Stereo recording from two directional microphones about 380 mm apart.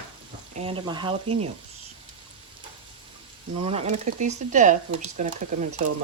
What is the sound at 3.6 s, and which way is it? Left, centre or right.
Speech, centre.